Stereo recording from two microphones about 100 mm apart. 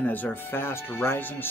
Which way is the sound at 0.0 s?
15° left (ahead or behind).